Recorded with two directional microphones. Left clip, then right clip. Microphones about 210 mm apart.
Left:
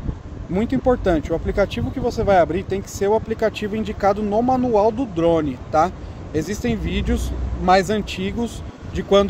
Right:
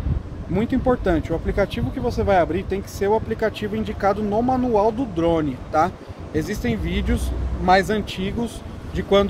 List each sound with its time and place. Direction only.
0.6 s speech: 35° left (ahead or behind)